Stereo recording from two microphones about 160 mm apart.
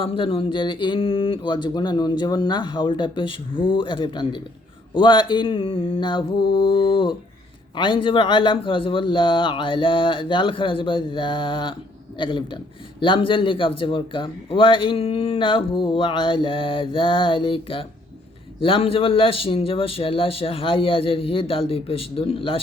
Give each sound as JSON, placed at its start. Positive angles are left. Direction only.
{"t": 0.0, "sound": "a man's voice", "side_deg": 35}